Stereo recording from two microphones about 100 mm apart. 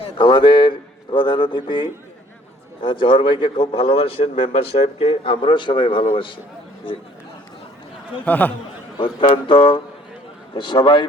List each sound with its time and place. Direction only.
0.0 s a man's voice: 55° left (ahead or behind)
8.2 s speech: 15° left (ahead or behind)
9.0 s a man's voice: 55° left (ahead or behind)